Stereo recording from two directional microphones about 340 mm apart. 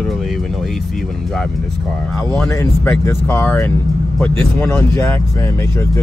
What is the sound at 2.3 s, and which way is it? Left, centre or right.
Speech, centre.